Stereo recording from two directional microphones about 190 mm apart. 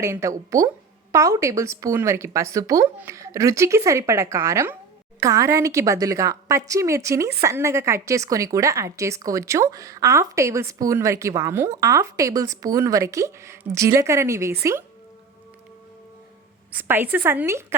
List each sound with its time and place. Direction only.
0.0 s a woman's voice: 15° right (ahead or behind)
16.7 s a woman's voice: 10° right (ahead or behind)